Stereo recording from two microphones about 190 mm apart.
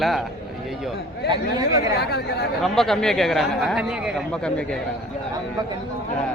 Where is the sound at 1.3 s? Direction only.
20° right (ahead or behind).